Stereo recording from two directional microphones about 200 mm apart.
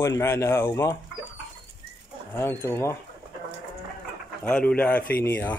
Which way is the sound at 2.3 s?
10° left (ahead or behind).